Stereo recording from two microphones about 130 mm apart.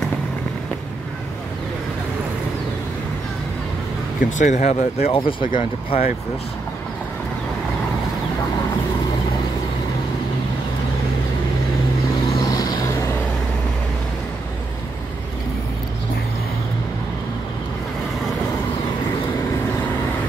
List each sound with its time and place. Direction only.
4.2 s speech: 70° left (ahead or behind); by 6.0 s 50° left (ahead or behind)
12.4 s vehicle: 30° left (ahead or behind)